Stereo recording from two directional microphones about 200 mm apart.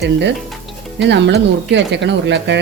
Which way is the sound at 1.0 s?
60° right (ahead or behind).